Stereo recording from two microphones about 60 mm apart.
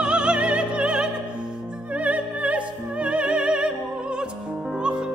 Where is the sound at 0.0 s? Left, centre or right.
Centre.